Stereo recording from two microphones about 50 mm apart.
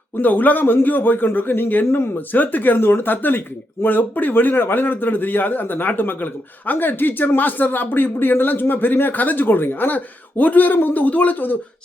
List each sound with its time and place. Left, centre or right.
0.2 s speech: left